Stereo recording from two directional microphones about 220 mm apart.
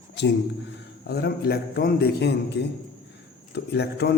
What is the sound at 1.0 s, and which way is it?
A man's voice, 45° left (ahead or behind).